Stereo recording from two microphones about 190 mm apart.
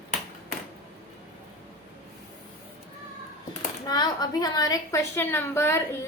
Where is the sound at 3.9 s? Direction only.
20° left (ahead or behind).